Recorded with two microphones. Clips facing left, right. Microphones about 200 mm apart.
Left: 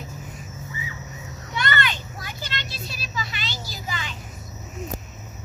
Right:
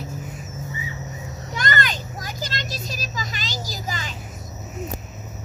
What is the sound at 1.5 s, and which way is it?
Vehicle, 40° right (ahead or behind).